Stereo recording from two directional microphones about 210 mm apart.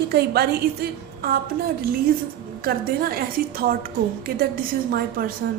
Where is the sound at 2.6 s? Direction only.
45° right (ahead or behind).